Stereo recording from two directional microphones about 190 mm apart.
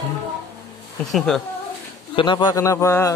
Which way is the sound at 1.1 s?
Centre (ahead or behind).